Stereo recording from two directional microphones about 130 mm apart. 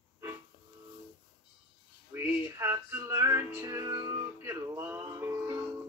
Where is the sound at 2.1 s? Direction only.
20° right (ahead or behind).